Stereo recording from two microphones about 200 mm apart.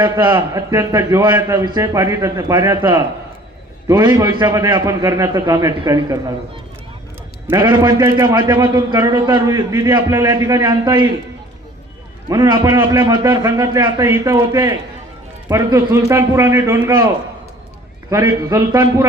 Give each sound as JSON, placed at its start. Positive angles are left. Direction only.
{"t": 0.0, "sound": "a man's voice", "side_deg": -20}
{"t": 7.4, "sound": "a man's voice", "side_deg": -20}
{"t": 12.3, "sound": "a man's voice", "side_deg": -20}
{"t": 18.1, "sound": "a man's voice", "side_deg": -15}